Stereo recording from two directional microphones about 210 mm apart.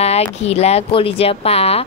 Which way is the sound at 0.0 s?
30° left (ahead or behind).